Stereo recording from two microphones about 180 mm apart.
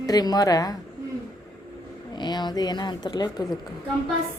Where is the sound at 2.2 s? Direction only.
25° left (ahead or behind).